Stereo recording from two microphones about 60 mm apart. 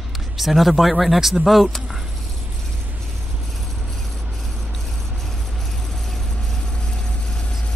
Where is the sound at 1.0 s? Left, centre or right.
Centre.